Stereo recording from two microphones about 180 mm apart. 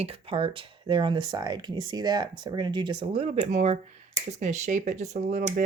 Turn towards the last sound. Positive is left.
turn(degrees=-40)  # may be behind; listen again after turning